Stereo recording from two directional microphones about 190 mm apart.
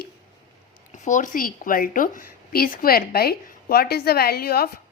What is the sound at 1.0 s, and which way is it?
A woman's voice, 45° left (ahead or behind).